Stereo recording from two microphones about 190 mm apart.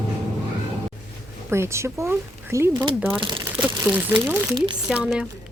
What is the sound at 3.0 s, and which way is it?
Speech, 5° right (ahead or behind).